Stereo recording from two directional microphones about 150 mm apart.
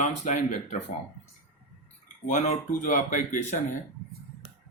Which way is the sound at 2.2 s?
55° left (ahead or behind).